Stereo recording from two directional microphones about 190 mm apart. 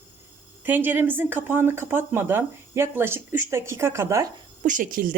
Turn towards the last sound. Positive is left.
turn(degrees=-45)  # may be behind; listen again after turning